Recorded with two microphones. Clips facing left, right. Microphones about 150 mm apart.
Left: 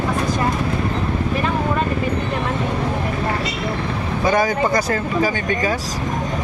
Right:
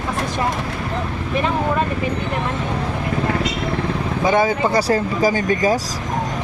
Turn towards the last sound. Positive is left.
turn(degrees=-40)  # may be behind; listen again after turning